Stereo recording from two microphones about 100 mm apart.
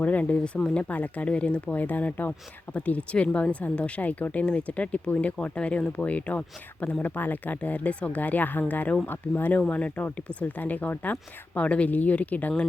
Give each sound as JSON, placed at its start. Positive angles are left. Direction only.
{"t": 0.0, "sound": "speech", "side_deg": 15}